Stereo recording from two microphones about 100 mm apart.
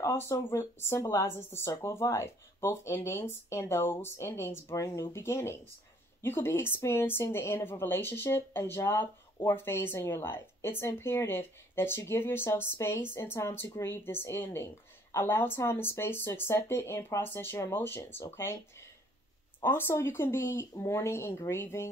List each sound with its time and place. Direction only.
0.0 s speech: 25° left (ahead or behind)